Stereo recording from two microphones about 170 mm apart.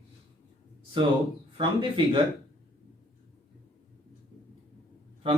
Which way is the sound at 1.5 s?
30° right (ahead or behind).